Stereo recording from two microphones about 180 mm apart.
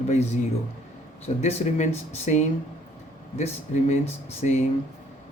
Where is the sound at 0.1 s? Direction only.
40° left (ahead or behind).